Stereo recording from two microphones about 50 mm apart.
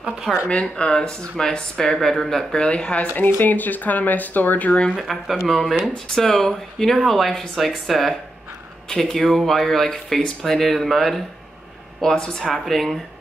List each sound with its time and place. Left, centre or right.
0.5 s speech: left
2.6 s speech: left
3.3 s speech: left
4.9 s speech: centre
8.8 s speech: centre
12.0 s speech: centre